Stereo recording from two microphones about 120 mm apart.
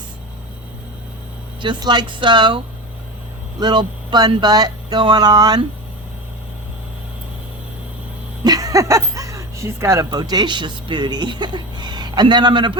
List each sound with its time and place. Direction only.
1.6 s speech: 40° right (ahead or behind)
3.6 s speech: 35° right (ahead or behind)
8.4 s speech: 30° right (ahead or behind)